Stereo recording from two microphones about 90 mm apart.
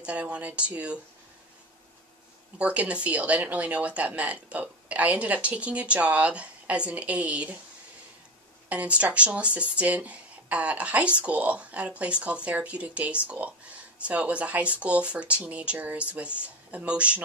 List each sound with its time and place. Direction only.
0.0 s speech: 15° right (ahead or behind)
2.6 s speech: 15° right (ahead or behind)
8.6 s speech: 15° right (ahead or behind)